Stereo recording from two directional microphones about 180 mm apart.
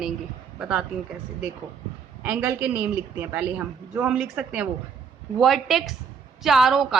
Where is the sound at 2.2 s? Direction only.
10° right (ahead or behind).